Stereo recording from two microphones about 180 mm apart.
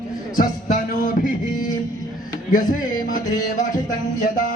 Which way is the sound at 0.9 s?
45° left (ahead or behind).